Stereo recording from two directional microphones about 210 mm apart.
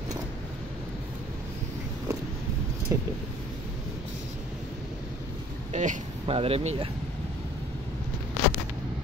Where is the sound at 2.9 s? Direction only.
15° right (ahead or behind).